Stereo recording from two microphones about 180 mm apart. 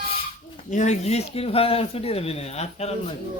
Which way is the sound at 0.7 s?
40° left (ahead or behind).